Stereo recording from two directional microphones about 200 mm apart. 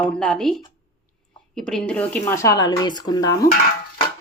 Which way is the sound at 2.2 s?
15° left (ahead or behind).